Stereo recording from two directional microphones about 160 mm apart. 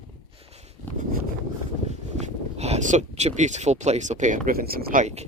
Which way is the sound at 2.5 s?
40° right (ahead or behind).